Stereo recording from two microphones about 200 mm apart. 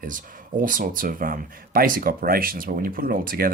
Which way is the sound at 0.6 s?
40° right (ahead or behind).